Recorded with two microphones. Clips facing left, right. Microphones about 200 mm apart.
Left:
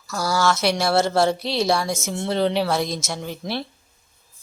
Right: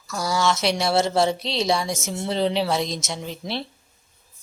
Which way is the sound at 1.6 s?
20° right (ahead or behind).